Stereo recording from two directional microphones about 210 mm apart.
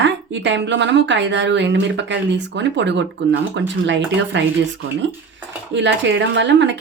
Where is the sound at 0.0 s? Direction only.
60° right (ahead or behind).